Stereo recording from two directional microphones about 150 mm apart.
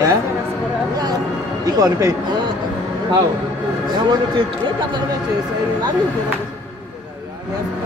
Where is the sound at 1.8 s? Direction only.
25° right (ahead or behind).